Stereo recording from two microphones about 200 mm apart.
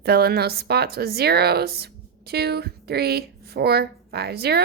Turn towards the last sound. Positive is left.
turn(degrees=-50)  # may be behind; listen again after turning